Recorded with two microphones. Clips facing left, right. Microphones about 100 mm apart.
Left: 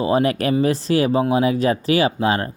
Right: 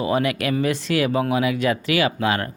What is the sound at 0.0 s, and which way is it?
Speech, 35° left (ahead or behind).